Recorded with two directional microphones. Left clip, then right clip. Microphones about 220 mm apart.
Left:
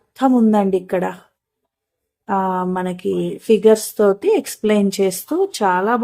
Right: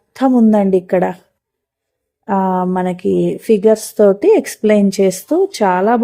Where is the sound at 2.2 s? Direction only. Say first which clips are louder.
Right 3 dB; 25° right (ahead or behind).